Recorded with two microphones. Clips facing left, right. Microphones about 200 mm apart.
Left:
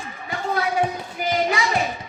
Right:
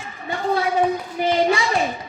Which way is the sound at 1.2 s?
30° right (ahead or behind).